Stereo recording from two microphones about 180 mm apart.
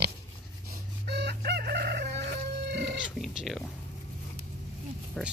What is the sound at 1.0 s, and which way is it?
Chicken, 65° right (ahead or behind).